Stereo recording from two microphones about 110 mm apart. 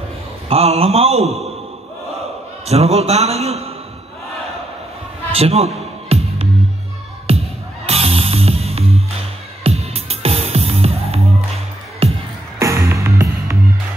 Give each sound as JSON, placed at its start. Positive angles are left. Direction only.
{"t": 0.5, "sound": "a man's voice", "side_deg": -65}
{"t": 2.6, "sound": "a man's voice", "side_deg": -75}
{"t": 5.3, "sound": "a man's voice", "side_deg": -65}
{"t": 6.0, "sound": "music", "side_deg": -65}
{"t": 12.5, "sound": "music", "side_deg": -25}